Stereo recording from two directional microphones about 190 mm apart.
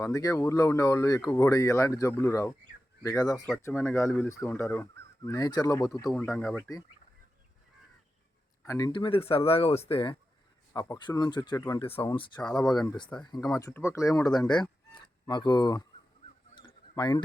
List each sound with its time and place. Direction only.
0.0 s speech: 20° left (ahead or behind)
8.6 s speech: 20° left (ahead or behind)
10.7 s speech: 15° left (ahead or behind)
11.8 s speech: 30° left (ahead or behind)
12.4 s speech: 5° left (ahead or behind)
13.2 s speech: 20° left (ahead or behind)
16.9 s speech: 20° left (ahead or behind)